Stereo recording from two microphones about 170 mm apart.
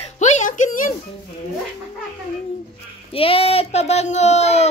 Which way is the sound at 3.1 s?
35° left (ahead or behind).